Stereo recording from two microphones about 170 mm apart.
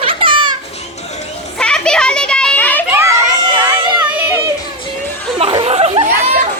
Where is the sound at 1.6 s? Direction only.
5° left (ahead or behind).